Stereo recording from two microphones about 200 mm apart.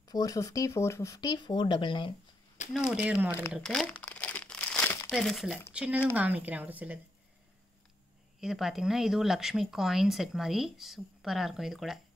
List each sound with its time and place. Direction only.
0.0 s speech: 20° left (ahead or behind)
2.9 s speech: 5° right (ahead or behind)
3.5 s speech: 5° left (ahead or behind)
4.0 s crumpling: 5° left (ahead or behind)
5.1 s a woman's voice: centre (ahead or behind)
8.4 s speech: centre (ahead or behind)